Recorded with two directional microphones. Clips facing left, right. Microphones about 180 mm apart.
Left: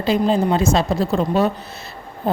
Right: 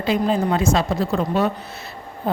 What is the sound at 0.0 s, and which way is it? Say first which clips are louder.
A woman's voice: left 2 dB; 30° left (ahead or behind).